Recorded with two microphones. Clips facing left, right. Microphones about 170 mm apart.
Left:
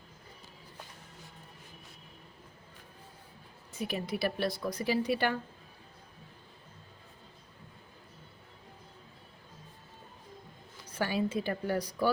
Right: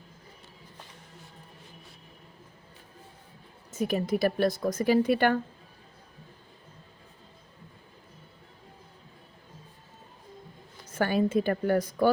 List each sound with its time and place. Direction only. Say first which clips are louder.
3.7 s speech: right 8 dB; 45° right (ahead or behind)
10.8 s speech: right 6 dB; 50° right (ahead or behind)